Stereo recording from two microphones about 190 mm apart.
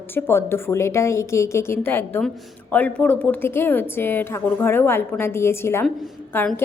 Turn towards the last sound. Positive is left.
turn(degrees=10)  # may be behind; listen again after turning